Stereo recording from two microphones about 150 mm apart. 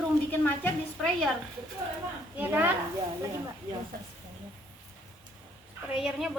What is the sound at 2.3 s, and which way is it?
Speech, 15° right (ahead or behind).